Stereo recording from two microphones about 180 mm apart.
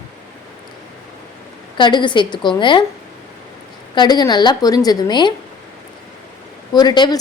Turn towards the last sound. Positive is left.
turn(degrees=25)  # may be behind; listen again after turning